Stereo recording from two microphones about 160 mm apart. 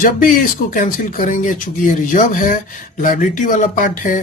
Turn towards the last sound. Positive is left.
turn(degrees=55)  # may be behind; listen again after turning